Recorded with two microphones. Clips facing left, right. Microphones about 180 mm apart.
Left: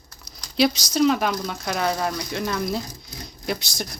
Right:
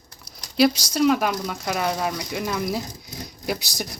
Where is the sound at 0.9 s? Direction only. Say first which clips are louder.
Even; 5° right (ahead or behind).